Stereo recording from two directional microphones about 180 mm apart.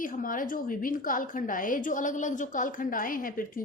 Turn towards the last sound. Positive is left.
turn(degrees=50)  # may be behind; listen again after turning